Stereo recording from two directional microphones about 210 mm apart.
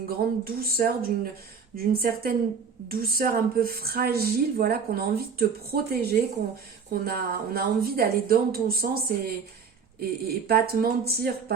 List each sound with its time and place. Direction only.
0.4 s a woman's voice: 45° right (ahead or behind)